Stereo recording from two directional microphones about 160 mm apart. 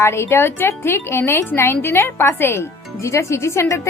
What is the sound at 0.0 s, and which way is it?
Speech, 15° left (ahead or behind).